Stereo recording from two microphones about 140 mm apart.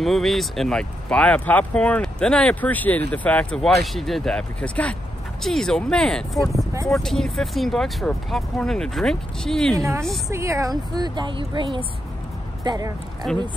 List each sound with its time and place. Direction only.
0.0 s speech: centre (ahead or behind)
9.8 s a woman's voice: 20° right (ahead or behind)
13.2 s speech: centre (ahead or behind)